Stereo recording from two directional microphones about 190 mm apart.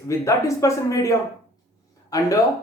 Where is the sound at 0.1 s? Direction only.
15° left (ahead or behind).